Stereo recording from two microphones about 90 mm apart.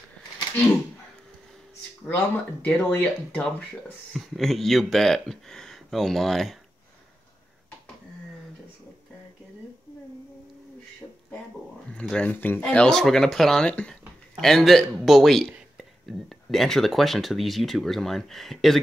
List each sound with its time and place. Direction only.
2.0 s speech: 25° left (ahead or behind)
4.1 s speech: centre (ahead or behind)
11.9 s speech: 10° left (ahead or behind)